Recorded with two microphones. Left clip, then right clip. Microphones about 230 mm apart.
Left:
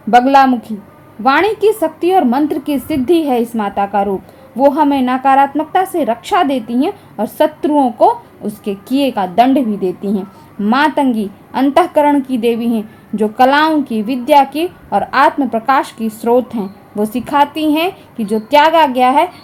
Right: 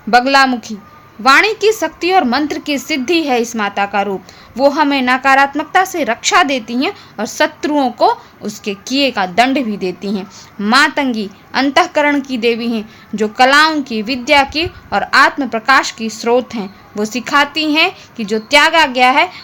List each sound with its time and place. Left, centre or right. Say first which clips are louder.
0.1 s a woman's voice: left 2 dB; centre